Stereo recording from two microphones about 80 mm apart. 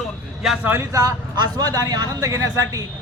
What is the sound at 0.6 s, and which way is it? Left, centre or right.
Speech, right.